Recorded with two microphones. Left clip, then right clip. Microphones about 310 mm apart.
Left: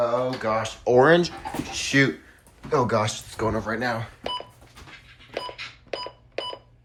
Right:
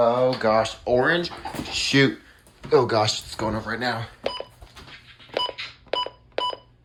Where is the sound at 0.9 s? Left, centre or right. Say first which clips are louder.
Left 4 dB; centre.